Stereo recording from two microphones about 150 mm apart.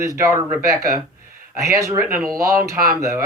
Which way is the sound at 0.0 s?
20° right (ahead or behind).